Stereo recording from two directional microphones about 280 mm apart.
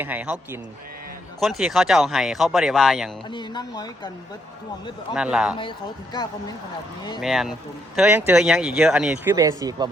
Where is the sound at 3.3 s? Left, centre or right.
Centre.